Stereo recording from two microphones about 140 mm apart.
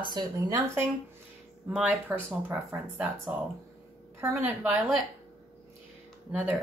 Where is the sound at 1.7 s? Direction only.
5° right (ahead or behind).